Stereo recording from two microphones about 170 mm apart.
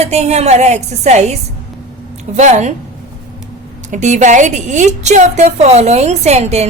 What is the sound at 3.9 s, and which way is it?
A woman's voice, 45° right (ahead or behind).